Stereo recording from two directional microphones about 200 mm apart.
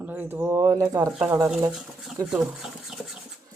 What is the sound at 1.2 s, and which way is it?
Speech, 5° right (ahead or behind).